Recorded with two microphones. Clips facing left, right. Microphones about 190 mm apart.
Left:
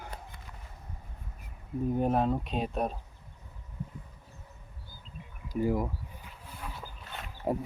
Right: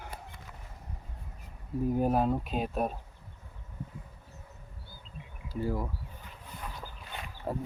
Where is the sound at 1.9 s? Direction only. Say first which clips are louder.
Even; 5° right (ahead or behind).